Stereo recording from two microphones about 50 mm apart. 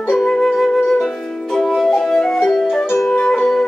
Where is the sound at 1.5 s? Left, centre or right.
Centre.